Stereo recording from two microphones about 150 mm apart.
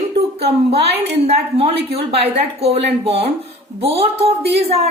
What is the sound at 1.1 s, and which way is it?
A woman's voice, 40° right (ahead or behind).